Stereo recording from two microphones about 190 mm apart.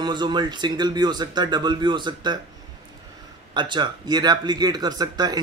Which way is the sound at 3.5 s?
25° right (ahead or behind).